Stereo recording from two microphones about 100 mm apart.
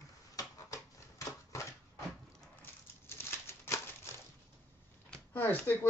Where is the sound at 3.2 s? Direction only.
25° left (ahead or behind).